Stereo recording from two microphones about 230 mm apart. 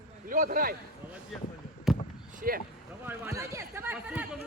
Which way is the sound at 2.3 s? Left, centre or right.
Right.